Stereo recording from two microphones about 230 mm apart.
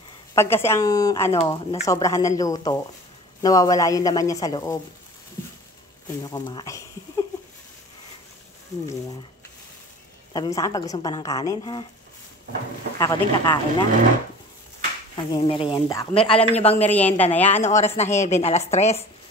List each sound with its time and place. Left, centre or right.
0.3 s a woman's voice: centre
1.4 s a woman's voice: left
6.3 s speech: centre
10.3 s a woman's voice: centre
13.0 s a woman's voice: centre
15.1 s a woman's voice: left
16.2 s a woman's voice: left
16.9 s a woman's voice: centre
17.6 s a woman's voice: left